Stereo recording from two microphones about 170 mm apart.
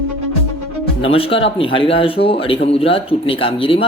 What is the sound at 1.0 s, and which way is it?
Speech, 35° left (ahead or behind).